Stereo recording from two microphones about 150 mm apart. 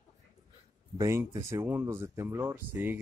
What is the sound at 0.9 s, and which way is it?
Speech, 20° right (ahead or behind).